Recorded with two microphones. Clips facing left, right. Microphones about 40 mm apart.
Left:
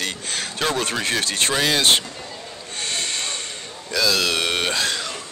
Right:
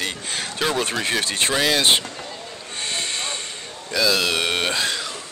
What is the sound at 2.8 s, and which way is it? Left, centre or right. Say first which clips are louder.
Hiss: even; centre.